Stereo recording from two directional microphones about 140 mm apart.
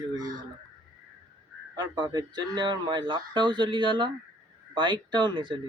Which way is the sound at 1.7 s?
30° right (ahead or behind).